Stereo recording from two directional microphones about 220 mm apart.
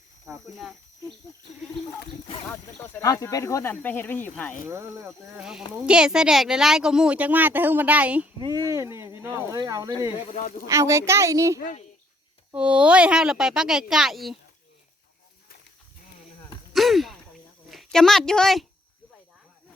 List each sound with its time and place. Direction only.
0.5 s speech: centre (ahead or behind)
2.5 s speech: 5° left (ahead or behind)
4.7 s speech: 10° right (ahead or behind)
8.4 s speech: 15° right (ahead or behind)
10.2 s speech: 35° left (ahead or behind)
10.7 s speech: 15° right (ahead or behind)
16.7 s a sound: centre (ahead or behind)
17.7 s speech: centre (ahead or behind)